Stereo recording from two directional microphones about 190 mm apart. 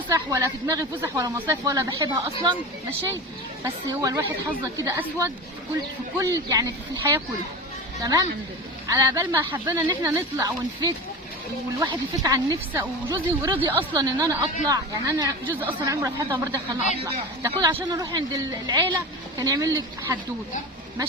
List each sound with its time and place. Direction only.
0.1 s speech: 15° right (ahead or behind)
3.6 s speech: 20° right (ahead or behind)